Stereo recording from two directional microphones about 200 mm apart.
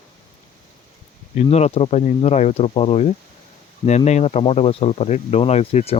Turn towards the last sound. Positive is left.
turn(degrees=30)  # may be behind; listen again after turning